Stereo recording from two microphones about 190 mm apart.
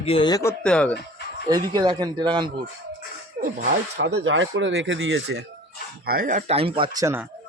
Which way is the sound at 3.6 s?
60° right (ahead or behind).